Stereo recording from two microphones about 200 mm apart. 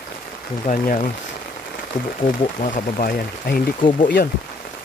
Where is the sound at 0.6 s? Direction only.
40° left (ahead or behind).